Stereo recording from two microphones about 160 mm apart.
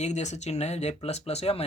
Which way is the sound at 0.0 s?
45° left (ahead or behind).